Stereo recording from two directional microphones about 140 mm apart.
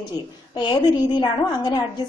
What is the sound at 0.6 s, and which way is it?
A woman's voice, 30° left (ahead or behind).